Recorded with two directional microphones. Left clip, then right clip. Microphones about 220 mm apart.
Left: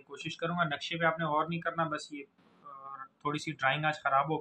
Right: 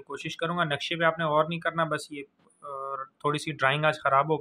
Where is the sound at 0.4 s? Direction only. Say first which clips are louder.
Right 4 dB; 50° right (ahead or behind).